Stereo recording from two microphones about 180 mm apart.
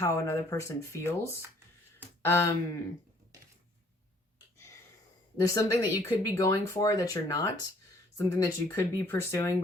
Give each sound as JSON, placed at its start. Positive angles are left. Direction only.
{"t": 0.0, "sound": "speech", "side_deg": 15}
{"t": 1.4, "sound": "a sound", "side_deg": -10}
{"t": 2.2, "sound": "speech", "side_deg": 15}
{"t": 5.4, "sound": "speech", "side_deg": 20}